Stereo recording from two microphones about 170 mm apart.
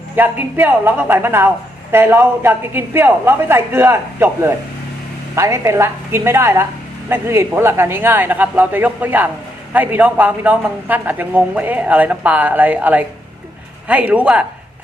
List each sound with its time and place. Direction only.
0.2 s speech: 10° right (ahead or behind)